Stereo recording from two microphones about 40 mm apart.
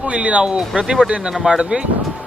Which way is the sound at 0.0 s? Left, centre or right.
Right.